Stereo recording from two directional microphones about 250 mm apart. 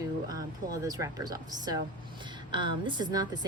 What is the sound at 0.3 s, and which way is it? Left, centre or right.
A woman's voice, centre.